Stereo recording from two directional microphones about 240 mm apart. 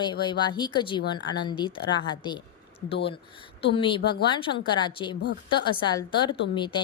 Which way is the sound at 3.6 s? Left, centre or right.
Left.